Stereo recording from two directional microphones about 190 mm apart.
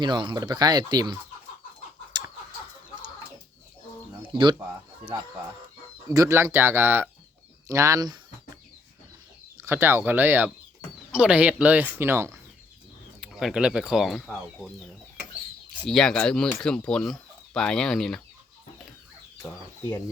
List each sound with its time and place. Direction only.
0.0 s speech: 25° right (ahead or behind)
4.3 s speech: 25° right (ahead or behind)
6.1 s speech: 15° right (ahead or behind)
9.6 s speech: 15° right (ahead or behind)
15.9 s speech: 5° left (ahead or behind)
19.4 s speech: 10° left (ahead or behind)